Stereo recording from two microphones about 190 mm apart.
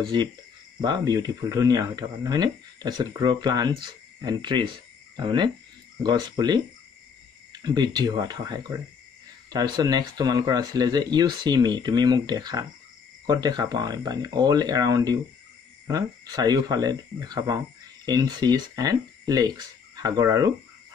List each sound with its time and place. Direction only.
0.7 s speech: 20° right (ahead or behind)
7.6 s speech: 20° right (ahead or behind)